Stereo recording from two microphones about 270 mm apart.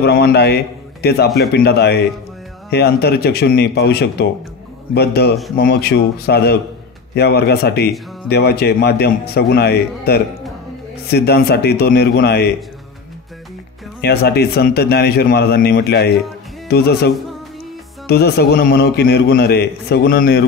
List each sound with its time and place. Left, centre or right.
0.0 s a man's voice: left
14.0 s a man's voice: left